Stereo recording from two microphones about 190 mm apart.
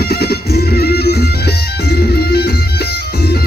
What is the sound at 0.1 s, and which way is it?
Music, 55° left (ahead or behind).